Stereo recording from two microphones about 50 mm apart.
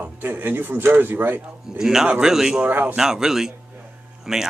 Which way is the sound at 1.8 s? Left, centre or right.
Centre.